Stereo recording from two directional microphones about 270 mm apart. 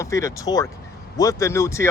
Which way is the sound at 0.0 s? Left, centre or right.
Centre.